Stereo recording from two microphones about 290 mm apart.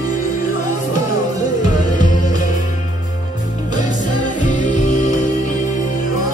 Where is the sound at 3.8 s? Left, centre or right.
Left.